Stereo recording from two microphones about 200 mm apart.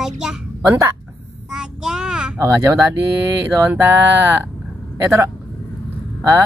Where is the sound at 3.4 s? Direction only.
10° right (ahead or behind).